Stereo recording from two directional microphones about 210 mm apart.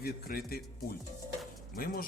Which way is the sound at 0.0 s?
45° left (ahead or behind).